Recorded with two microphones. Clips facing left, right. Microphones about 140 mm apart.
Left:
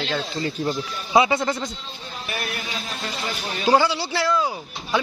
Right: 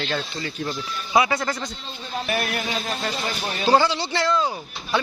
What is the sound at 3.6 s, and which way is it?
Speech, 10° left (ahead or behind).